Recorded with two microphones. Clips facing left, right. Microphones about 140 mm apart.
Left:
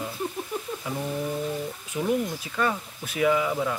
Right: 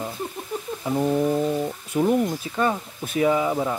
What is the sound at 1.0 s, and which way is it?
Speech, 40° right (ahead or behind).